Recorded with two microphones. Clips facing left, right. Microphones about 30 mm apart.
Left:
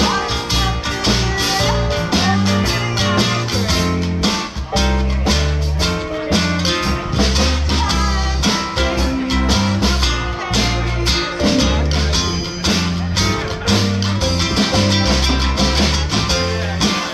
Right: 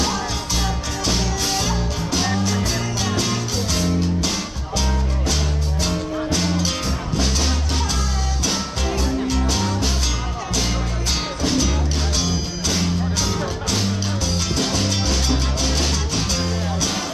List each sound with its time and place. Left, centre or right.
0.0 s music: left
9.0 s music: left
11.4 s music: left